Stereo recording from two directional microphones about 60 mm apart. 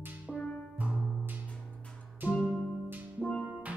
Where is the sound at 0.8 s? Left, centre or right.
Right.